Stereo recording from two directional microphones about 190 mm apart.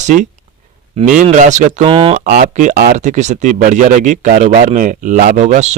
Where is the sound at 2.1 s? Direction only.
50° right (ahead or behind).